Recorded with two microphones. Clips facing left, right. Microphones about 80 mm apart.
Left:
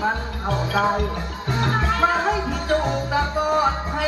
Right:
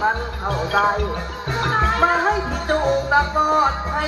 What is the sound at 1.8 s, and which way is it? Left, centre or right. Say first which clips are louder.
Music: right 4 dB; right.